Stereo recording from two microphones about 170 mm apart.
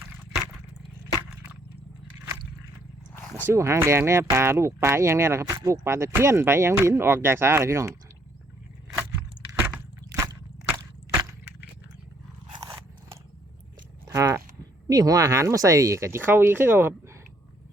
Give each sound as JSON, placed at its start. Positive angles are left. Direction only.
{"t": 3.2, "sound": "roaring cats", "side_deg": 20}
{"t": 3.4, "sound": "speech", "side_deg": -15}
{"t": 10.2, "sound": "a sound", "side_deg": -15}
{"t": 12.5, "sound": "biting", "side_deg": -25}
{"t": 14.0, "sound": "a sound", "side_deg": -20}
{"t": 14.8, "sound": "speech", "side_deg": -20}